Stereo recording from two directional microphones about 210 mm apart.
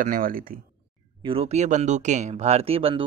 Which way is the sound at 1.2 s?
25° right (ahead or behind).